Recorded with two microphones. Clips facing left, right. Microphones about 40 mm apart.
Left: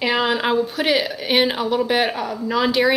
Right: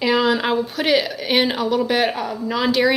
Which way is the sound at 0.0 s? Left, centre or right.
Centre.